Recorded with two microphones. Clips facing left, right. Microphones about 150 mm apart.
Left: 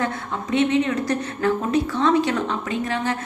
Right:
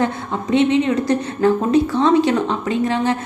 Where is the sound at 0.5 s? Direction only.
25° right (ahead or behind).